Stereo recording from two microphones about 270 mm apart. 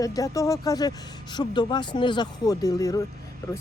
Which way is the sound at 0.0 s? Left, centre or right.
Centre.